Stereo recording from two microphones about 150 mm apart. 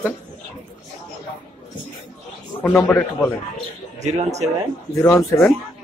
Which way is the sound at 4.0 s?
50° right (ahead or behind).